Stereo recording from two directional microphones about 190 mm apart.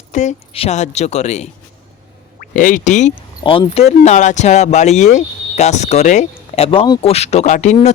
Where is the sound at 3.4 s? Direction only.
25° left (ahead or behind).